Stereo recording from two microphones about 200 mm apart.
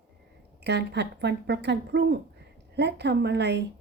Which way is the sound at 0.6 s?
60° right (ahead or behind).